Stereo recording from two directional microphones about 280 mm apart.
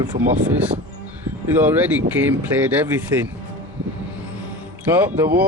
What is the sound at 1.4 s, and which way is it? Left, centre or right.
Speech, centre.